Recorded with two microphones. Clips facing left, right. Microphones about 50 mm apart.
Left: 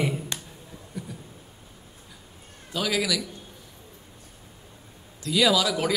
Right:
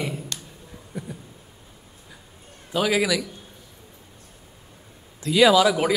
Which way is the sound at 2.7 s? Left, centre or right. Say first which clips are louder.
Right 5 dB; right.